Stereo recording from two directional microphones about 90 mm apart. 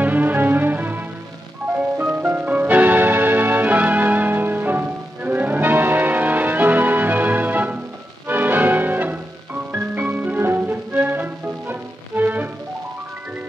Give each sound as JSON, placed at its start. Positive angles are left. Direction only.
{"t": 0.0, "sound": "music", "side_deg": -20}